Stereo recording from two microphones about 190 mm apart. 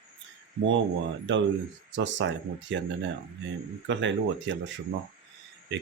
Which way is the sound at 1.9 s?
75° right (ahead or behind).